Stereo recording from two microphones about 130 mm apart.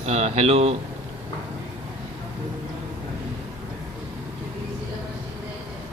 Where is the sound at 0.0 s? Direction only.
55° right (ahead or behind).